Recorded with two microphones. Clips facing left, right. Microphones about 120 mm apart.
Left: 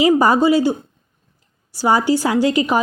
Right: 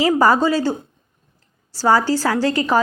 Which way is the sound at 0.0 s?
20° left (ahead or behind).